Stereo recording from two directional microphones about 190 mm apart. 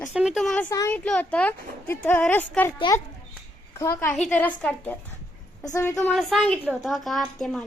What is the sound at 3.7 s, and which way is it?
Speech, 15° left (ahead or behind).